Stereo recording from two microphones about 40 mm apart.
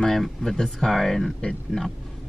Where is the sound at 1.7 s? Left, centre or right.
Centre.